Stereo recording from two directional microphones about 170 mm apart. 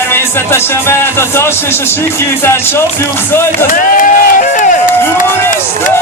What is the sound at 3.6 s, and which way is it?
Crowd, 50° left (ahead or behind).